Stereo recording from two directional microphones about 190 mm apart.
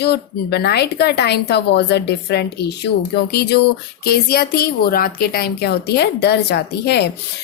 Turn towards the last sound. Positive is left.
turn(degrees=60)  # may be behind; listen again after turning